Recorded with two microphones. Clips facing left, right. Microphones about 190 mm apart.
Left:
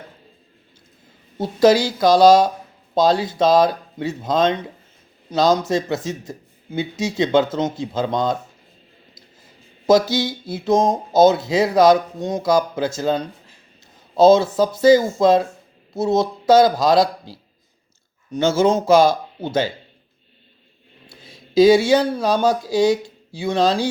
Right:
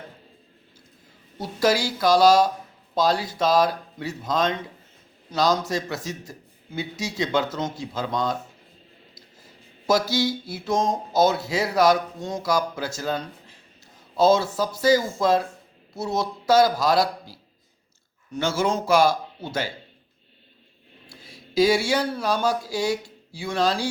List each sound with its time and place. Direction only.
1.4 s speech: 20° left (ahead or behind)
9.8 s speech: 20° left (ahead or behind)
21.1 s speech: 20° left (ahead or behind)